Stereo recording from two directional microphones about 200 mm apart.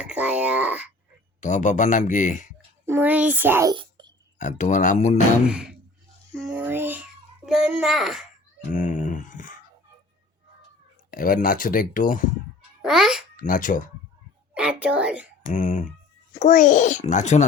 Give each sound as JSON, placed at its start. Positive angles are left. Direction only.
{"t": 0.0, "sound": "a sound", "side_deg": -5}
{"t": 1.4, "sound": "speech", "side_deg": 35}
{"t": 2.8, "sound": "a child's voice", "side_deg": -10}
{"t": 3.8, "sound": "whispering", "side_deg": -20}
{"t": 4.4, "sound": "speech", "side_deg": 40}
{"t": 5.5, "sound": "a woman's voice", "side_deg": -5}
{"t": 6.3, "sound": "a sound", "side_deg": -5}
{"t": 8.7, "sound": "a sound", "side_deg": 40}
{"t": 11.1, "sound": "speech", "side_deg": 45}
{"t": 12.8, "sound": "a child's voice", "side_deg": -5}
{"t": 13.3, "sound": "speech", "side_deg": 40}
{"t": 14.5, "sound": "a woman's voice", "side_deg": -5}
{"t": 15.5, "sound": "speech", "side_deg": 40}